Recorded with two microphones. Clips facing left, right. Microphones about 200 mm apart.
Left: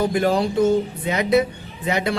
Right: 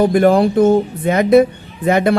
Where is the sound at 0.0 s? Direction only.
55° right (ahead or behind).